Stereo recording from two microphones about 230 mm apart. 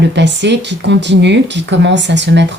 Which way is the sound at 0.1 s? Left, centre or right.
Right.